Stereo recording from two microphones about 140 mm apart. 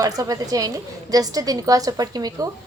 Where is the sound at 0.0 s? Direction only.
25° right (ahead or behind).